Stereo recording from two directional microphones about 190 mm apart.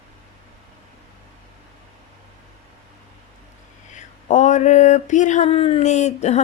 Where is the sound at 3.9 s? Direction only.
40° left (ahead or behind).